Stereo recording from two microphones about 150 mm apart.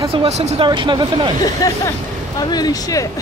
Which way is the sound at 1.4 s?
25° left (ahead or behind).